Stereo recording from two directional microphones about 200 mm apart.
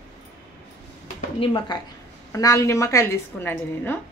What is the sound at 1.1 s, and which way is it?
A woman's voice, 25° left (ahead or behind).